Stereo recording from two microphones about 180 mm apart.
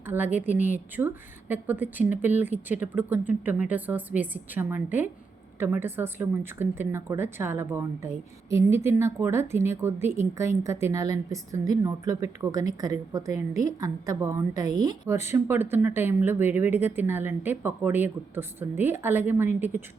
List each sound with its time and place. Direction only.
0.0 s a woman's voice: 10° right (ahead or behind)